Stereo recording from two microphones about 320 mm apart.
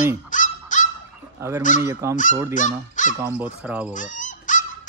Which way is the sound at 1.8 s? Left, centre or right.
Centre.